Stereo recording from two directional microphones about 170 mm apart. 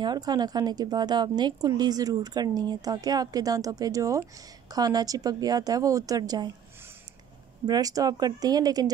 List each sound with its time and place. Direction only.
0.0 s a woman's voice: 25° right (ahead or behind)
7.6 s a woman's voice: 20° right (ahead or behind)